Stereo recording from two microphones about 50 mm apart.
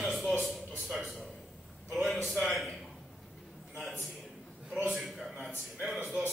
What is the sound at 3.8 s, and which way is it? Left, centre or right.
A man's voice, centre.